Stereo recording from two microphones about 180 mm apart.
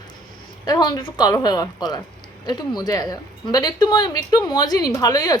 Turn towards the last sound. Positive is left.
turn(degrees=20)  # may be behind; listen again after turning